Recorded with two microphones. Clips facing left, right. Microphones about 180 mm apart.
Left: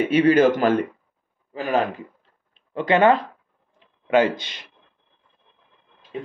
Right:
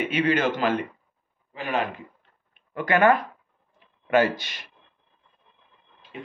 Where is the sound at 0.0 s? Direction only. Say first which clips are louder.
Left 7 dB; 40° left (ahead or behind).